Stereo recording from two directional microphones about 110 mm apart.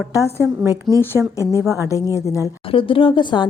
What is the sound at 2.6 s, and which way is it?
Speech, 55° left (ahead or behind).